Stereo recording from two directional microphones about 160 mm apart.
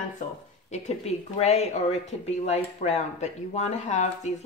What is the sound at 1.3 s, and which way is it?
Speech, 45° left (ahead or behind).